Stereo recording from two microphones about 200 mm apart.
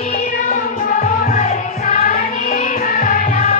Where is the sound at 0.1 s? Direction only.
40° left (ahead or behind).